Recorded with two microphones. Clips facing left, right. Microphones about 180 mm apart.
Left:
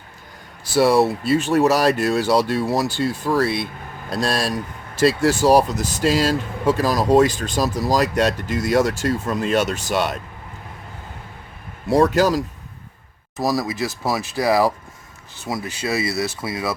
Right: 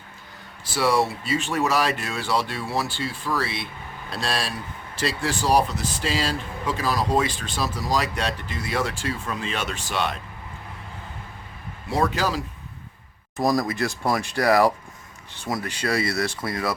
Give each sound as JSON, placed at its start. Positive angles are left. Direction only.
{"t": 0.8, "sound": "speech", "side_deg": 35}
{"t": 11.9, "sound": "speech", "side_deg": 45}
{"t": 13.3, "sound": "speech", "side_deg": 5}